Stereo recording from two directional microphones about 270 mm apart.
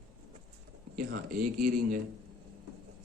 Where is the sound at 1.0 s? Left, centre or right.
Right.